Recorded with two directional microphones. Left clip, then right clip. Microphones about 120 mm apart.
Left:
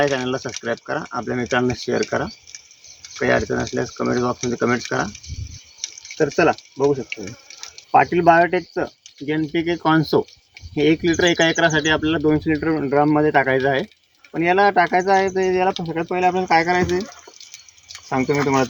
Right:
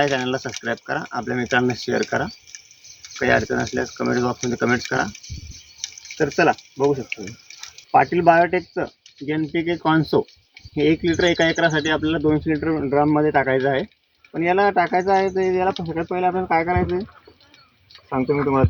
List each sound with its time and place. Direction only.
0.0 s speech: 30° right (ahead or behind)
5.8 s water: 35° left (ahead or behind)
6.1 s speech: 20° right (ahead or behind)
7.1 s water: 30° left (ahead or behind)
7.9 s speech: 10° right (ahead or behind)
18.1 s speech: 15° left (ahead or behind)